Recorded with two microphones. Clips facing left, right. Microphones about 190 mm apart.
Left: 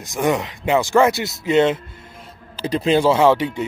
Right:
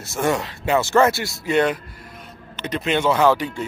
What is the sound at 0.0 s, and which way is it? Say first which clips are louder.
Speech: left 2 dB; 15° left (ahead or behind).